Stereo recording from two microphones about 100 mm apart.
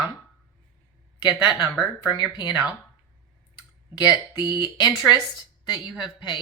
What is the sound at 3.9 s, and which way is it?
Speech, 45° left (ahead or behind).